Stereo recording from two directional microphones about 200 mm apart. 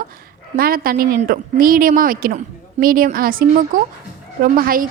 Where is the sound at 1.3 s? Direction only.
45° right (ahead or behind).